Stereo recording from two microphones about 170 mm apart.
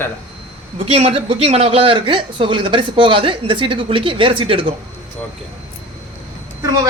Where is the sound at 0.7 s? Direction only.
35° right (ahead or behind).